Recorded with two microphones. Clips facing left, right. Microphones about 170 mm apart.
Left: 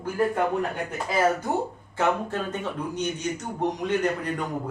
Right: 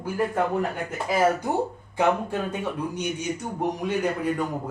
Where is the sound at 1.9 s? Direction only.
10° right (ahead or behind).